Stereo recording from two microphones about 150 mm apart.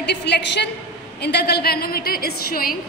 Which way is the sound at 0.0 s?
90° left.